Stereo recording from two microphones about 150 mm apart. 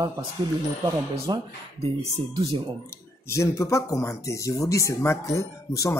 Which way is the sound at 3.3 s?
20° left (ahead or behind).